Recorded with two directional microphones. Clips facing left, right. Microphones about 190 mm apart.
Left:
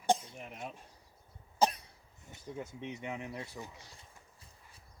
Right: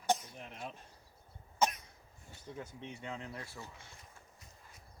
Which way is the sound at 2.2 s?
20° left (ahead or behind).